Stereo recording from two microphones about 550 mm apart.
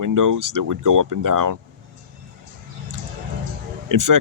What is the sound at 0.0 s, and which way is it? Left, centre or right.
Speech, right.